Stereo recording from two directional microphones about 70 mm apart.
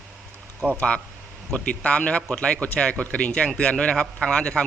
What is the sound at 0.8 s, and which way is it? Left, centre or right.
Speech, centre.